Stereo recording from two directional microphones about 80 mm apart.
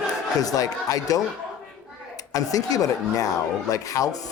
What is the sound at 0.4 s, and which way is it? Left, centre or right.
Speech, left.